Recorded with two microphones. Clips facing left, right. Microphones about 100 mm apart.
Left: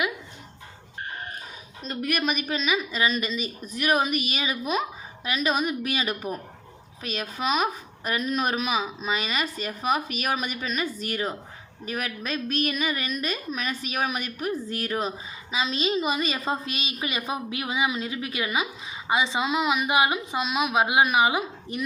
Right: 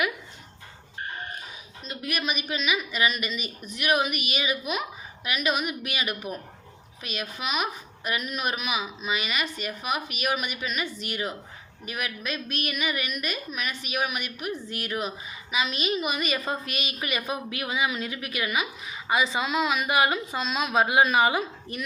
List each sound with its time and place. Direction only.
1.8 s a woman's voice: 50° left (ahead or behind); by 21.4 s 15° left (ahead or behind)